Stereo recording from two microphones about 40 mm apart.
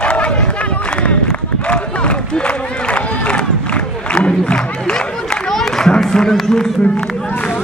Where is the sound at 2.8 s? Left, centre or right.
Left.